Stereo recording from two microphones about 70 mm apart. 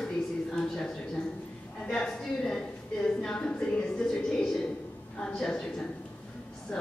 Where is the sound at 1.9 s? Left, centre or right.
Centre.